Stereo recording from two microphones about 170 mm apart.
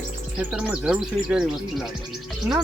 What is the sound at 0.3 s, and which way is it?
Speech, 5° right (ahead or behind).